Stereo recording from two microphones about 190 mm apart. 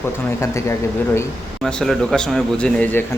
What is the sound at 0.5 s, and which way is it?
Speech, 15° left (ahead or behind).